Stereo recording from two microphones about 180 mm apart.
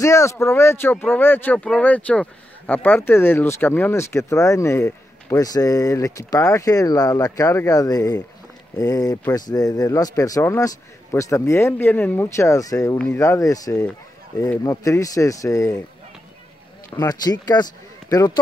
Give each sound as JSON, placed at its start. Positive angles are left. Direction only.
{"t": 0.0, "sound": "speech", "side_deg": 15}
{"t": 16.9, "sound": "speech", "side_deg": 20}